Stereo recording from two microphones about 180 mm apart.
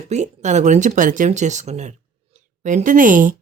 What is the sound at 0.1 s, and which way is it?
Speech, 40° right (ahead or behind).